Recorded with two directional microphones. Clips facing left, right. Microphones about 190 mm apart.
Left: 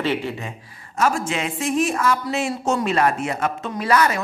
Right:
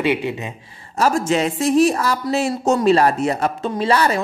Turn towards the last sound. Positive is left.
turn(degrees=-30)  # may be behind; listen again after turning